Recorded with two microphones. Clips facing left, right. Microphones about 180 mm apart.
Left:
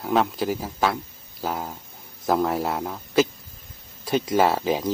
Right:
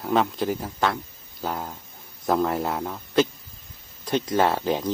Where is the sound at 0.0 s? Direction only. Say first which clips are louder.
Even; centre (ahead or behind).